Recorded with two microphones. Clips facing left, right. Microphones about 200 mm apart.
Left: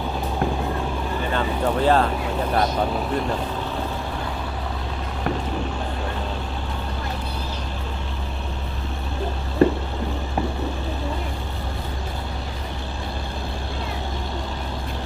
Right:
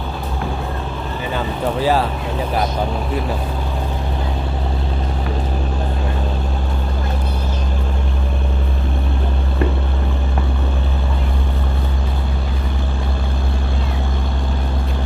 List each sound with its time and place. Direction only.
1.8 s speech: 5° right (ahead or behind)
9.6 s vehicle: 30° left (ahead or behind)